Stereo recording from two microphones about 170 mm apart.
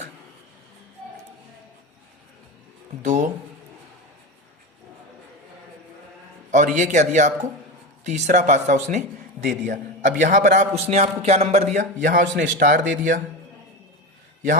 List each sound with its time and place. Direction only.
3.0 s a man's voice: 45° right (ahead or behind)
6.5 s a man's voice: 45° right (ahead or behind)